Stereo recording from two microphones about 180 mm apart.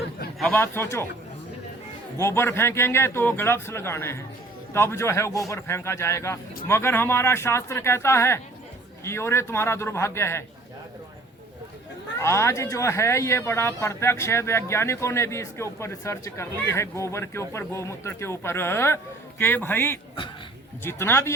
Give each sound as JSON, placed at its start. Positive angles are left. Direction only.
{"t": 0.3, "sound": "speech", "side_deg": 5}
{"t": 2.1, "sound": "speech", "side_deg": 15}
{"t": 12.2, "sound": "speech", "side_deg": 15}